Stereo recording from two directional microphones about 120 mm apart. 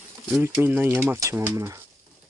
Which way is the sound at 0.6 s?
15° right (ahead or behind).